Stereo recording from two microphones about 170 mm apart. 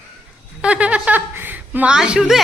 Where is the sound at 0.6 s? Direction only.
5° right (ahead or behind).